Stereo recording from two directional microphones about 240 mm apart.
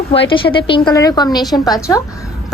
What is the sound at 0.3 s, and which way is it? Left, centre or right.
A woman's voice, left.